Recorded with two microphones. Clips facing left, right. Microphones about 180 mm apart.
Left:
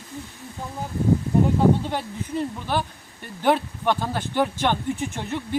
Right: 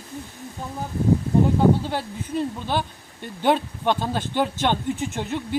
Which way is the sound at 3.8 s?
15° right (ahead or behind).